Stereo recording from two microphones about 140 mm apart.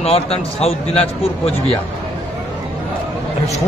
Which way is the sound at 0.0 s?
45° left (ahead or behind).